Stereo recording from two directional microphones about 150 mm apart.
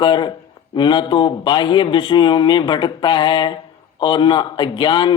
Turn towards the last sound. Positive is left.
turn(degrees=30)  # may be behind; listen again after turning